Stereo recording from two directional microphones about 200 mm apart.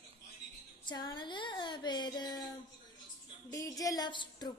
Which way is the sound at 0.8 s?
20° left (ahead or behind).